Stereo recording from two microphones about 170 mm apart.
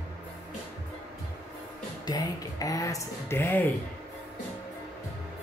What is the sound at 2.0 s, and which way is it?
Speech, 20° left (ahead or behind).